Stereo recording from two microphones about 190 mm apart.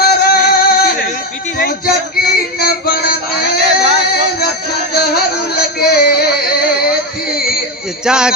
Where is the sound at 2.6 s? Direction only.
50° left (ahead or behind).